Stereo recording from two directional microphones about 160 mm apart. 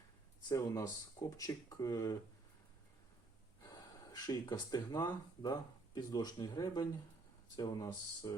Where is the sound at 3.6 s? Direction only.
20° left (ahead or behind).